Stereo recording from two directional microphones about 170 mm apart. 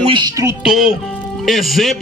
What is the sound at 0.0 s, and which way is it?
Speech, 30° right (ahead or behind).